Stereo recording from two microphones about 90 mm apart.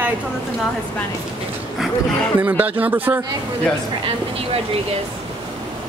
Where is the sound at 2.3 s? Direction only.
20° right (ahead or behind).